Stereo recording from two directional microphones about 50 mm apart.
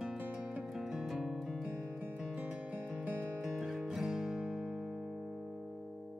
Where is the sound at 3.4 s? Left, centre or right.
Centre.